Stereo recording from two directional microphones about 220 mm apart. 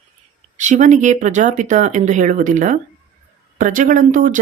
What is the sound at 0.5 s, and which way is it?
Speech, 35° right (ahead or behind).